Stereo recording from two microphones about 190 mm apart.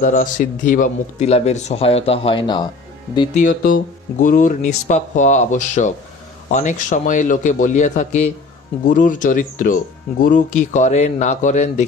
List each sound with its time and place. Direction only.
0.0 s speech: 45° left (ahead or behind); by 2.7 s 25° left (ahead or behind)
3.3 s speech: 50° left (ahead or behind)